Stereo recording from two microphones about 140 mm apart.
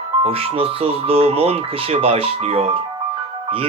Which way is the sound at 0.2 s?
45° right (ahead or behind).